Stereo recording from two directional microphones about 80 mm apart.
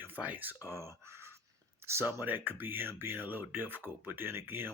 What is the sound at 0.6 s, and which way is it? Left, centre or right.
Speech, right.